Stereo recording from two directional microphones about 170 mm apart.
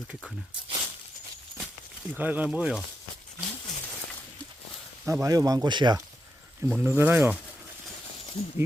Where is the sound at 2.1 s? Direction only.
10° right (ahead or behind).